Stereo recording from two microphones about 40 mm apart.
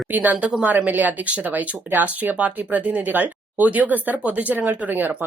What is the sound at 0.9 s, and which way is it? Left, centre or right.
Speech, right.